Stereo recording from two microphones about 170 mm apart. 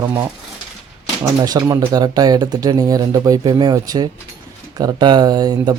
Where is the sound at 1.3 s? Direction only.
20° right (ahead or behind).